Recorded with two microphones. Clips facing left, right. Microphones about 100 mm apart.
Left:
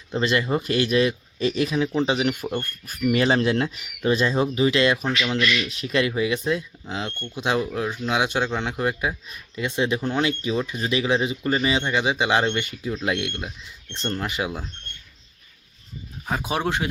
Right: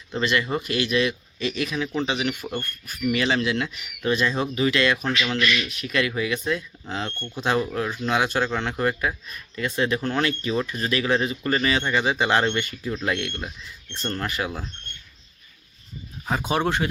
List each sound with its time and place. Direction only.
0.1 s speech: 30° left (ahead or behind)
6.8 s speech: 10° left (ahead or behind)
16.2 s speech: 5° left (ahead or behind)